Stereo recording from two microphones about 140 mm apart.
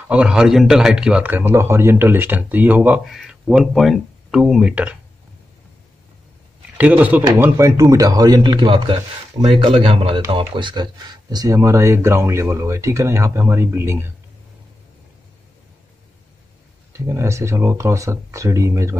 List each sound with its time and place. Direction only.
0.1 s a man's voice: 5° right (ahead or behind)
6.8 s a man's voice: 10° right (ahead or behind)
17.0 s speech: 20° right (ahead or behind)